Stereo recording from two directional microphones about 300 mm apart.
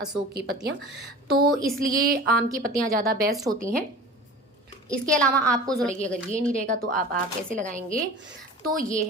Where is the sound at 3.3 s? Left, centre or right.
Centre.